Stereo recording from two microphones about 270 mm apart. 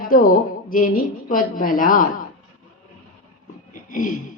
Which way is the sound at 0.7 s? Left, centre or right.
Left.